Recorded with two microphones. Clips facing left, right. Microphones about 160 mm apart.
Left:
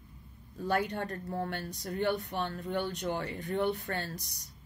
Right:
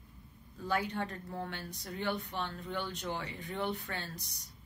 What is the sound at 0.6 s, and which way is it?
Speech, 55° left (ahead or behind).